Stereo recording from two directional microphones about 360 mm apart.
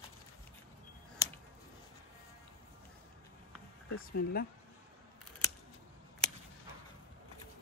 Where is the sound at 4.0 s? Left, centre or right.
Left.